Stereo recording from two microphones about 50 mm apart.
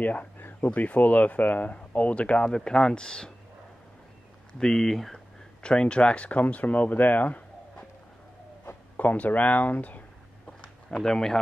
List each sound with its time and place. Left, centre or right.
0.0 s a sound: left
0.7 s speech: left; by 3.3 s centre
4.6 s speech: centre
5.6 s speech: centre
8.9 s speech: left
10.9 s speech: centre